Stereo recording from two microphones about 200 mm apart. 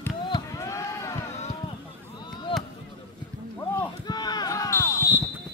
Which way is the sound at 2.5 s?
25° left (ahead or behind).